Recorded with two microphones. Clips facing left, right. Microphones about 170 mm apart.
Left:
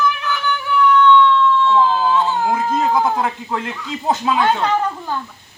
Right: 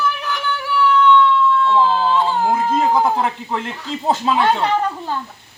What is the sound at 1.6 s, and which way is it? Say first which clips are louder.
Speech: even; 5° right (ahead or behind).